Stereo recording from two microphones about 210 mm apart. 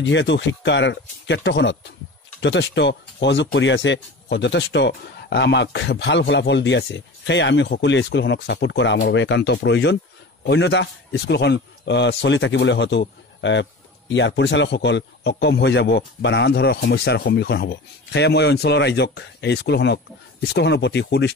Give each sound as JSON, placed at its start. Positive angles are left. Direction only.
{"t": 0.0, "sound": "a man's voice", "side_deg": 60}